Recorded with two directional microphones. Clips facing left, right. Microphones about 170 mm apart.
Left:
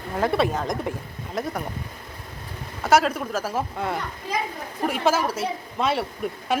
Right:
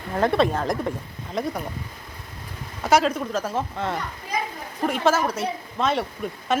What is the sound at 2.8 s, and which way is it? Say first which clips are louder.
Speech: even; centre (ahead or behind).